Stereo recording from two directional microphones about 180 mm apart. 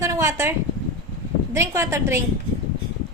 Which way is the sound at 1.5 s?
15° right (ahead or behind).